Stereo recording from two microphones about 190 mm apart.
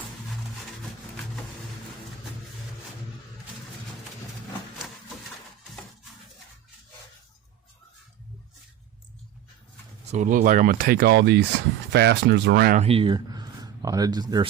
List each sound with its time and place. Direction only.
10.1 s speech: 40° right (ahead or behind); by 12.7 s 65° right (ahead or behind)
12.7 s speech: 30° right (ahead or behind)